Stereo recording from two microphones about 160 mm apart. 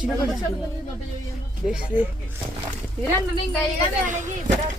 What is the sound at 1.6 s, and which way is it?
Speech, 5° right (ahead or behind).